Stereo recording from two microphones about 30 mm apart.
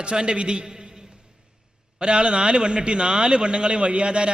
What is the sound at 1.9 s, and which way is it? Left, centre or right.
A man's voice, right.